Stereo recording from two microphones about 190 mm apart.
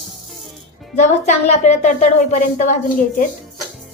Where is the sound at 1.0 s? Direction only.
40° left (ahead or behind).